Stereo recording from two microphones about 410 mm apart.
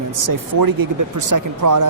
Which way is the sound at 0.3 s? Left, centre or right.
Right.